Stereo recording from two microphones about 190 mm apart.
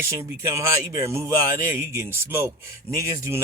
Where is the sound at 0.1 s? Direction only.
15° right (ahead or behind).